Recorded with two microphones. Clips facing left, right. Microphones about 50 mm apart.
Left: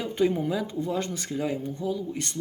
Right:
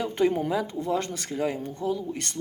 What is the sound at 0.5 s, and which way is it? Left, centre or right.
Speech, right.